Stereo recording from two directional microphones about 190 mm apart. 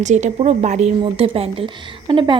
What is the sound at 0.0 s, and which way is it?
A woman's voice, 35° right (ahead or behind).